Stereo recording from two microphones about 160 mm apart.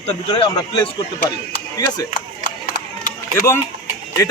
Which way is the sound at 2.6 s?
55° left (ahead or behind).